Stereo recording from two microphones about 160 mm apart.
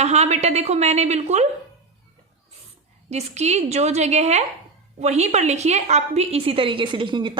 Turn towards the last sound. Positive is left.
turn(degrees=-30)  # may be behind; listen again after turning